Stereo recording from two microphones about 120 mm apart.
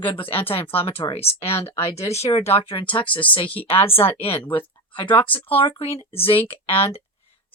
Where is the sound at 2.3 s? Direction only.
55° left (ahead or behind).